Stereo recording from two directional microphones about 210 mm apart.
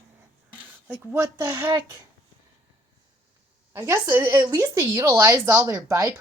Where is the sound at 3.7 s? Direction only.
15° right (ahead or behind).